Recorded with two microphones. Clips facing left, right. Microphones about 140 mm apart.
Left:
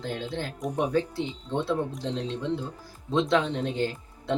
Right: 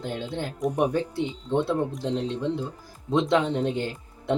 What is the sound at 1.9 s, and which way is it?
Speech, 15° right (ahead or behind).